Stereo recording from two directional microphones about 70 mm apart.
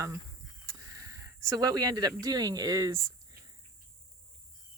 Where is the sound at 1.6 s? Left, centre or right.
Right.